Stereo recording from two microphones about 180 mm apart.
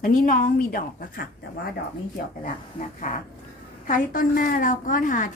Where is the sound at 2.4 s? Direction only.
50° left (ahead or behind).